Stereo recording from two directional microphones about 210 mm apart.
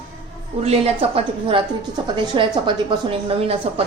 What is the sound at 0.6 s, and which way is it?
A woman's voice, 25° right (ahead or behind).